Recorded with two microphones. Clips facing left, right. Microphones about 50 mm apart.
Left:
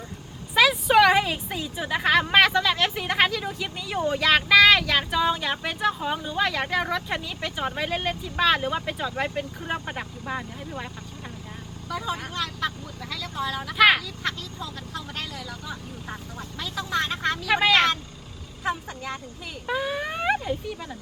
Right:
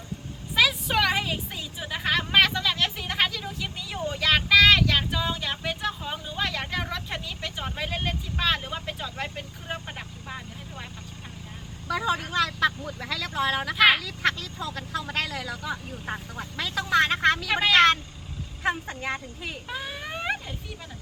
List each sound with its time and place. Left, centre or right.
0.5 s a sound: centre
2.3 s speech: centre
11.9 s speech: right
13.7 s speech: centre
14.0 s speech: right
16.6 s speech: right
17.5 s speech: centre
18.6 s speech: right
19.6 s speech: centre